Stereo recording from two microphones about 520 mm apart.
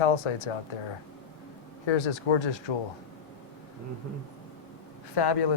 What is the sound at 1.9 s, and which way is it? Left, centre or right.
Speech, left.